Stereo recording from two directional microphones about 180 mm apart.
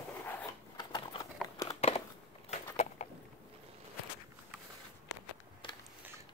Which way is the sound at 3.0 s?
40° left (ahead or behind).